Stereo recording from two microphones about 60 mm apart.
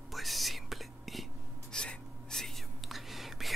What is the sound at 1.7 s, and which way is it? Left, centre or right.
Whispering, centre.